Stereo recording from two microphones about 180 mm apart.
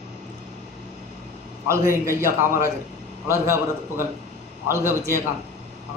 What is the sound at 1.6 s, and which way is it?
A man's voice, 15° right (ahead or behind).